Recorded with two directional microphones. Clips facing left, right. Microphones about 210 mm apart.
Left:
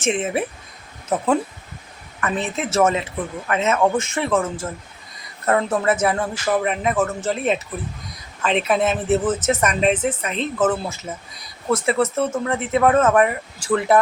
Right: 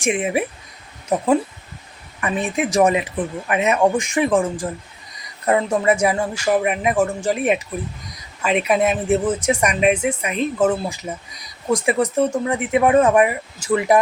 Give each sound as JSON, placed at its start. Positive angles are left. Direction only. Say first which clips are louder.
{"t": 0.0, "sound": "speech", "louder": "right 1 dB", "side_deg": -10}
{"t": 2.2, "sound": "speech", "louder": "right 2 dB", "side_deg": -15}